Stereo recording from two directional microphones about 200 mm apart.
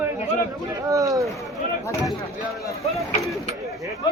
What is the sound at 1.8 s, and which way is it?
Speech, 15° left (ahead or behind).